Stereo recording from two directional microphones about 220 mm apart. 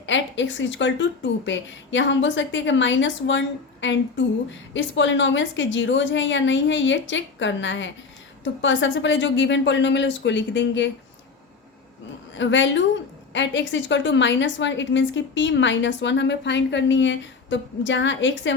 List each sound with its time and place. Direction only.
0.0 s a woman's voice: 55° left (ahead or behind)
12.3 s a woman's voice: 55° left (ahead or behind)